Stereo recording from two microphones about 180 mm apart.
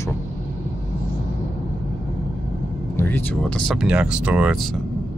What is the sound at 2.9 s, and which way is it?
Speech, 10° left (ahead or behind).